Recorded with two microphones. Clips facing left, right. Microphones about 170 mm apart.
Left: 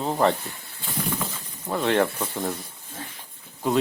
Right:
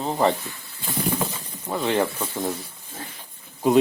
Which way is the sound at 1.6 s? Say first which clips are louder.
Left 1 dB; centre (ahead or behind).